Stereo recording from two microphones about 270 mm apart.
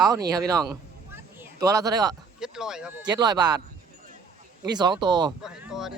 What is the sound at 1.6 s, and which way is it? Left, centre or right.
Speech, centre.